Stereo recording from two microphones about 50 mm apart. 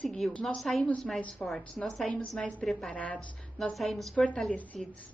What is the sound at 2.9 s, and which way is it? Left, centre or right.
Speech, left.